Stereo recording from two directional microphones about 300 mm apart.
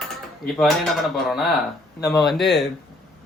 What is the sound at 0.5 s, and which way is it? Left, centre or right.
Speech, centre.